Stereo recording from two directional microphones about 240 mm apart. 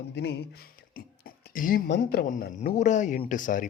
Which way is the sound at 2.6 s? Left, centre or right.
Left.